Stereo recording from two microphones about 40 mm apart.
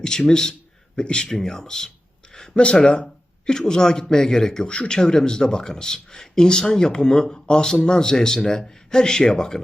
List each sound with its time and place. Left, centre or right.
0.3 s speech: centre
1.4 s speech: centre
2.6 s speech: left